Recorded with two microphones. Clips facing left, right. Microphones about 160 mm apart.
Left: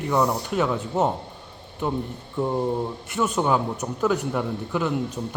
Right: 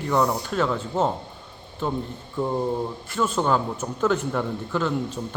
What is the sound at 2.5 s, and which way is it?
A man's voice, 15° left (ahead or behind).